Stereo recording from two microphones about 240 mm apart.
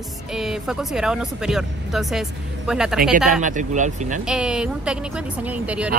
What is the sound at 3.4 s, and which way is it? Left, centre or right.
Speech, right.